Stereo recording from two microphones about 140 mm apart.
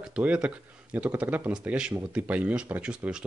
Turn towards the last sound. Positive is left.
turn(degrees=-5)  # may be behind; listen again after turning